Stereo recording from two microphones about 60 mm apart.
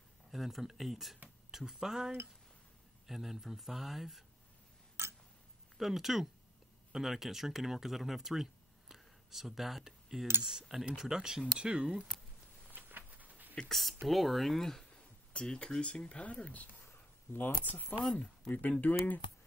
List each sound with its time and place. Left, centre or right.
0.3 s speech: centre
5.0 s a sound: right
5.8 s speech: centre
12.7 s a sound: right
13.6 s speech: centre
15.3 s speech: centre
16.8 s a sound: left
17.7 s speech: left
18.1 s speech: centre